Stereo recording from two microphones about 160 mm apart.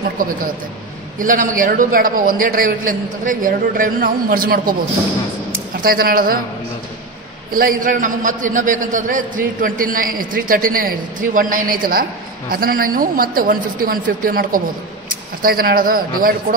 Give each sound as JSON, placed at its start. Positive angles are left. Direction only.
{"t": 0.2, "sound": "a man's voice", "side_deg": -60}
{"t": 5.8, "sound": "a man's voice", "side_deg": -65}
{"t": 7.5, "sound": "a man's voice", "side_deg": -60}